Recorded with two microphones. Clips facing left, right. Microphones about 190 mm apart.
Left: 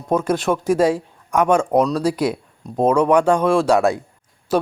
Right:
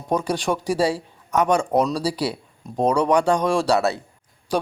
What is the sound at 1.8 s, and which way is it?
Speech, 10° right (ahead or behind).